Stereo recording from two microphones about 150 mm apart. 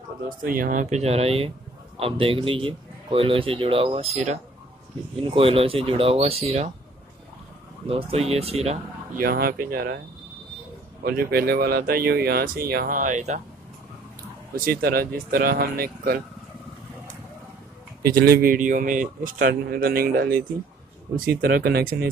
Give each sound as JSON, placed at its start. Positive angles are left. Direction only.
{"t": 0.4, "sound": "speech", "side_deg": -65}
{"t": 7.9, "sound": "speech", "side_deg": -40}
{"t": 9.1, "sound": "speech", "side_deg": -85}
{"t": 11.1, "sound": "speech", "side_deg": -85}
{"t": 14.5, "sound": "speech", "side_deg": -80}
{"t": 18.0, "sound": "speech", "side_deg": -85}